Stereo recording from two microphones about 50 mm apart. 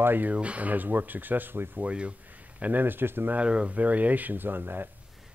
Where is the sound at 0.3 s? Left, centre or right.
Right.